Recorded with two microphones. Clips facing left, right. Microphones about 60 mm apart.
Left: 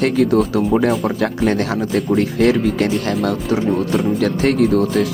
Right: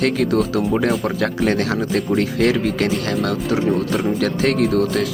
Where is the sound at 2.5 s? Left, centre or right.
Right.